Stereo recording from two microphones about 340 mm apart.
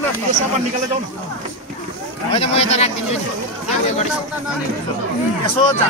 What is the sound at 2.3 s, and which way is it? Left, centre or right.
Speech, centre.